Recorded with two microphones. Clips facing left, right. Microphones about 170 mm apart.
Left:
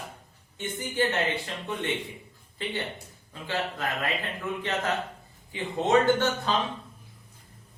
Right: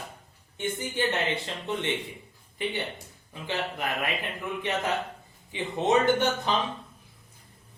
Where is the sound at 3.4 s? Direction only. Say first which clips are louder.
Even; 15° right (ahead or behind).